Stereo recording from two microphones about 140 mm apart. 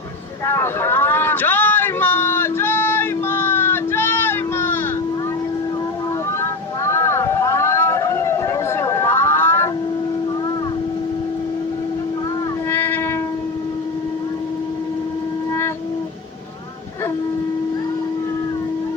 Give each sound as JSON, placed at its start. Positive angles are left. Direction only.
{"t": 0.4, "sound": "vehicle", "side_deg": 15}
{"t": 6.4, "sound": "vehicle", "side_deg": 20}
{"t": 12.7, "sound": "train", "side_deg": 15}